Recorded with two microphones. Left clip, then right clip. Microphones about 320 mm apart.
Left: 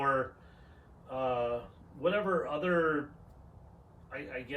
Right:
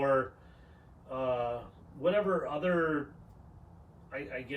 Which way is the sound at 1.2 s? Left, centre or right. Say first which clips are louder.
Even; centre.